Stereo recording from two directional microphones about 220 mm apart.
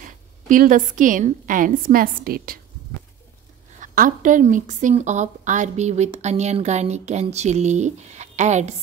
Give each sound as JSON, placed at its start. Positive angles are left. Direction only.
{"t": 0.0, "sound": "a woman's voice", "side_deg": -35}
{"t": 3.8, "sound": "a woman's voice", "side_deg": -35}